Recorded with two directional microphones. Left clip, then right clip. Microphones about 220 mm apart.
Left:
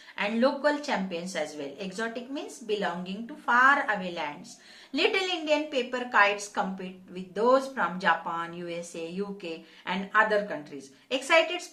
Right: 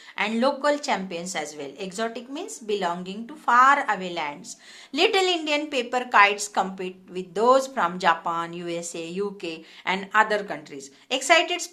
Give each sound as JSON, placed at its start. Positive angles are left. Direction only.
{"t": 0.2, "sound": "a woman's voice", "side_deg": -45}